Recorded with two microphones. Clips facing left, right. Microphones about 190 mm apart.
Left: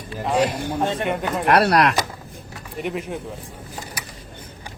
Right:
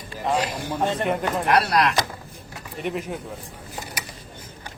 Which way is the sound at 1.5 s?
60° left (ahead or behind).